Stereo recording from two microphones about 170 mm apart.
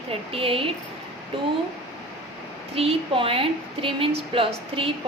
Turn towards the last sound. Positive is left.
turn(degrees=-35)  # may be behind; listen again after turning